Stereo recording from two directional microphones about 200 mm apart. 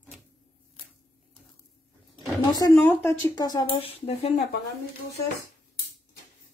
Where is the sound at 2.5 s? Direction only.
15° left (ahead or behind); by 4.3 s 30° left (ahead or behind).